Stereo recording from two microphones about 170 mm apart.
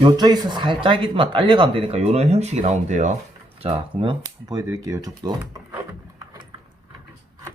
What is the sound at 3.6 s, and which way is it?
Speech, 30° right (ahead or behind).